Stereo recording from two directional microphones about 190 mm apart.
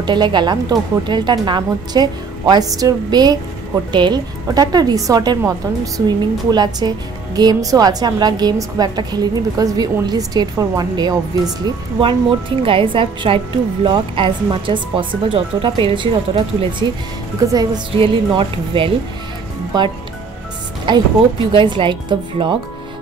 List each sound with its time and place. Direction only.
0.0 s a woman's voice: 25° right (ahead or behind)